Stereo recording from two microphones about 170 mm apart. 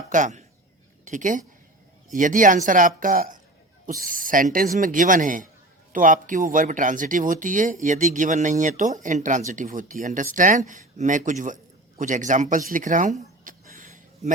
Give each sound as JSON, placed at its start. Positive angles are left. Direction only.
{"t": 0.1, "sound": "a woman's voice", "side_deg": -45}